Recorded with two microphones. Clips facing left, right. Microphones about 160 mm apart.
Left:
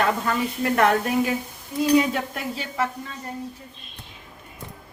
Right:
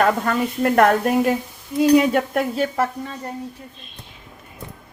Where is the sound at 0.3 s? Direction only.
50° right (ahead or behind).